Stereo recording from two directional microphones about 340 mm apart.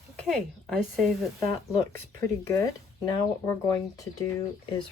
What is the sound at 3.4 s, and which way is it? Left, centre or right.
Speech, centre.